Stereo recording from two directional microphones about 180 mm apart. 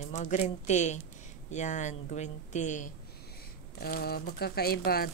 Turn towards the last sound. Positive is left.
turn(degrees=55)  # may be behind; listen again after turning